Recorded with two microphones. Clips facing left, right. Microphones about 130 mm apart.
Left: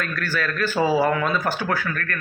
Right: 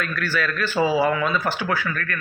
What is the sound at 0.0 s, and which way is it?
Speech, 45° left (ahead or behind).